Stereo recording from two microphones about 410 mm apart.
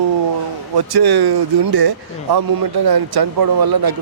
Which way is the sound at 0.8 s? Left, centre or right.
Right.